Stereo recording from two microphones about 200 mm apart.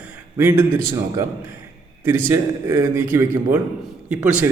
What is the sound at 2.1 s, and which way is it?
A man's voice, 15° right (ahead or behind).